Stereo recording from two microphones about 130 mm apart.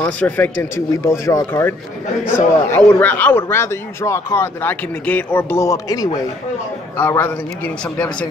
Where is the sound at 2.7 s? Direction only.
15° left (ahead or behind).